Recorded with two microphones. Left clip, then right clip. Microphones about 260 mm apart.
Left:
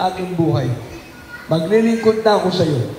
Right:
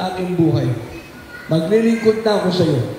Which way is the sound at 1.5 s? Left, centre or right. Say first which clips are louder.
Even; centre.